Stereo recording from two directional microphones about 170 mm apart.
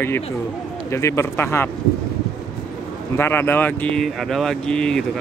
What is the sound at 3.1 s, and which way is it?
Speech, 15° left (ahead or behind).